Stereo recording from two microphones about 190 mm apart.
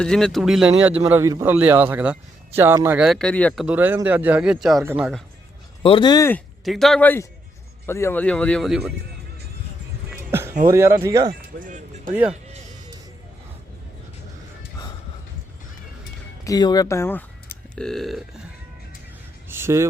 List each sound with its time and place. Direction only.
0.0 s speech: 5° left (ahead or behind)
0.9 s speech: 15° right (ahead or behind)
5.8 s speech: 25° left (ahead or behind)
6.7 s speech: centre (ahead or behind)
10.1 s music: 10° right (ahead or behind)
10.7 s speech: 15° right (ahead or behind)
11.3 s speech: 45° right (ahead or behind)
16.4 s speech: 20° left (ahead or behind); by 18.2 s centre (ahead or behind)
19.5 s speech: 10° right (ahead or behind)